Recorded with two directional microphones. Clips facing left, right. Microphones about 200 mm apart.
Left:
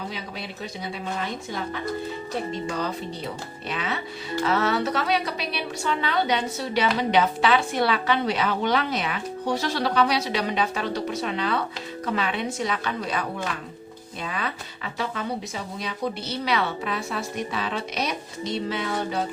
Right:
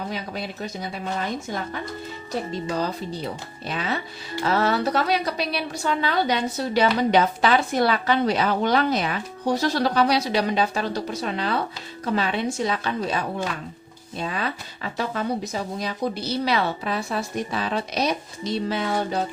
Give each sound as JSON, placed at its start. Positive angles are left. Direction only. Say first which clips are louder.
{"t": 0.1, "sound": "speech", "louder": "right 4 dB", "side_deg": -45}
{"t": 2.6, "sound": "a woman's voice", "louder": "right 2 dB", "side_deg": -35}